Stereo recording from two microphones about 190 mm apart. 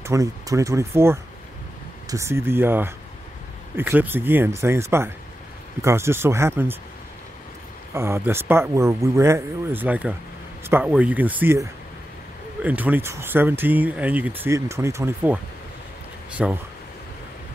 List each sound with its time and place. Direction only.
0.0 s speech: 15° right (ahead or behind)
7.9 s speech: 15° right (ahead or behind)